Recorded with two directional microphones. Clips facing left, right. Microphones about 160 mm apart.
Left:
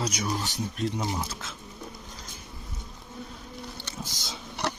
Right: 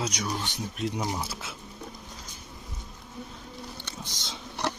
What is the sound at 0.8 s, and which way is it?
Speech, 10° right (ahead or behind).